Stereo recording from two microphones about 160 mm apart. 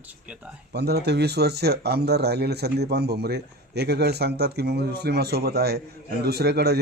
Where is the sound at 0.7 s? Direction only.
90° right.